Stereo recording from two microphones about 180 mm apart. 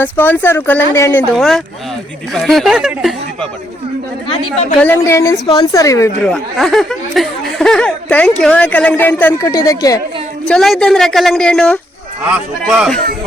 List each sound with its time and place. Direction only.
0.0 s a woman's voice: 10° left (ahead or behind)
1.4 s speech: centre (ahead or behind)
4.5 s a woman's voice: 10° left (ahead or behind)
6.2 s a woman's voice: centre (ahead or behind)
9.5 s speech: 20° left (ahead or behind)
10.4 s speech: 5° left (ahead or behind)